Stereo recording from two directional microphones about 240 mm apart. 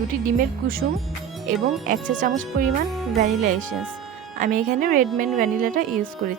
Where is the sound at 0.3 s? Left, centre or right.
Right.